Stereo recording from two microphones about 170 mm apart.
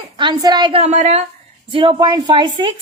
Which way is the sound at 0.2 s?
25° right (ahead or behind).